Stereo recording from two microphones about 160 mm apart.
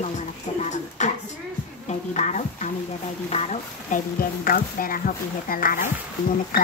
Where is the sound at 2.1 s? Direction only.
45° left (ahead or behind).